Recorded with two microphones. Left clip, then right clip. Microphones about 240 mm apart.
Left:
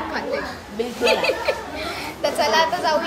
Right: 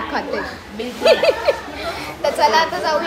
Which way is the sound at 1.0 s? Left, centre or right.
Centre.